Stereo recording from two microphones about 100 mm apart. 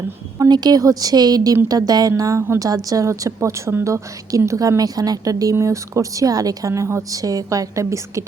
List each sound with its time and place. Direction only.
0.3 s a woman's voice: 45° right (ahead or behind)